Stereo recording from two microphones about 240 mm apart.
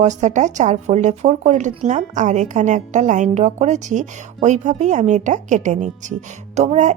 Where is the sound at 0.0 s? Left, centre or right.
Right.